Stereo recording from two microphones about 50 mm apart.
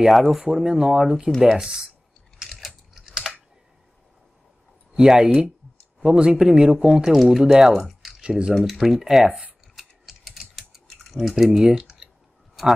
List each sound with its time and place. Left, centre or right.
0.1 s speech: centre
2.5 s typing: centre
4.9 s speech: centre
9.8 s typing: centre
11.1 s speech: centre